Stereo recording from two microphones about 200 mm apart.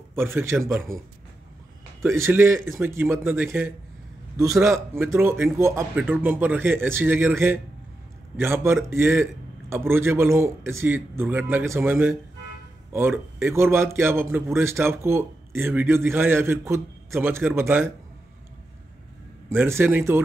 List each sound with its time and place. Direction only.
0.1 s speech: 10° right (ahead or behind)
2.0 s speech: 15° right (ahead or behind)
19.5 s speech: 10° right (ahead or behind)